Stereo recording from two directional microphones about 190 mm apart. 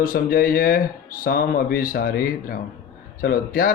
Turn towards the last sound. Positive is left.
turn(degrees=50)  # may be behind; listen again after turning